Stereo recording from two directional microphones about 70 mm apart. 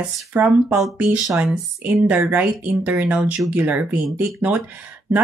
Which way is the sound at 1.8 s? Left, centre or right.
Right.